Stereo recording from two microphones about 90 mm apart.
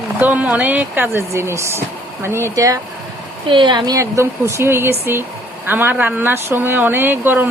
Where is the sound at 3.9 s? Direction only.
35° right (ahead or behind).